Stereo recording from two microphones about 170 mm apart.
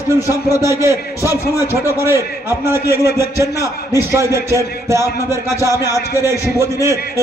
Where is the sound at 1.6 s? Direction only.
15° right (ahead or behind).